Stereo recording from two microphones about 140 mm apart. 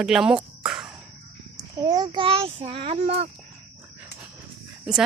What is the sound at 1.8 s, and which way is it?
A child's voice, 30° right (ahead or behind).